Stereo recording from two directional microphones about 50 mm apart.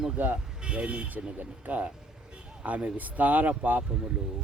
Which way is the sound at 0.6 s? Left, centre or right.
Right.